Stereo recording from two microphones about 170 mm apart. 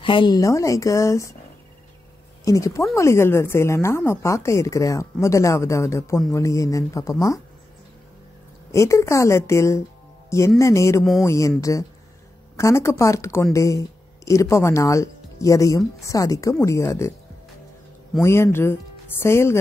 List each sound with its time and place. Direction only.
0.0 s speech: 30° left (ahead or behind)
2.4 s a woman's voice: 20° left (ahead or behind)
8.7 s a woman's voice: 15° left (ahead or behind)
12.5 s a woman's voice: 15° left (ahead or behind)
18.2 s a woman's voice: 15° left (ahead or behind)